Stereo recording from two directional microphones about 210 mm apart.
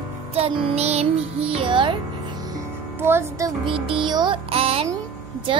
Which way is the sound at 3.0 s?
10° right (ahead or behind).